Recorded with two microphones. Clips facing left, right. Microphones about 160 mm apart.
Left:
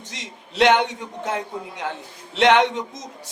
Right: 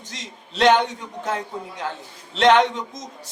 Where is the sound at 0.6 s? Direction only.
20° left (ahead or behind).